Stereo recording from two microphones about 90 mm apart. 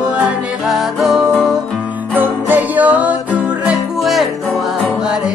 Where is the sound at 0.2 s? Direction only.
15° right (ahead or behind).